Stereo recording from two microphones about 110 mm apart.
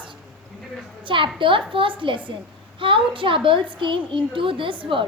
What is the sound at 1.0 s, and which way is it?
A woman's voice, 50° right (ahead or behind).